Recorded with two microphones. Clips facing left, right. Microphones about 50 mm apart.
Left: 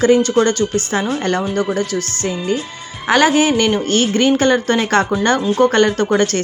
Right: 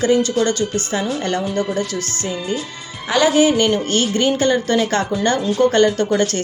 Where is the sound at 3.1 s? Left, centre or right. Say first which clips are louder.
Left 1 dB; left.